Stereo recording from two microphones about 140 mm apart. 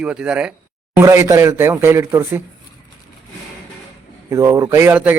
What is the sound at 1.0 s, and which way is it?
Speech, 20° right (ahead or behind).